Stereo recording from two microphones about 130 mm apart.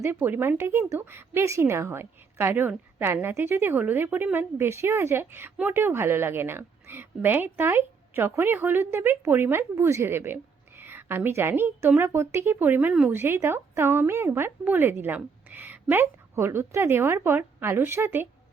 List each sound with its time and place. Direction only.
0.0 s a woman's voice: 15° right (ahead or behind)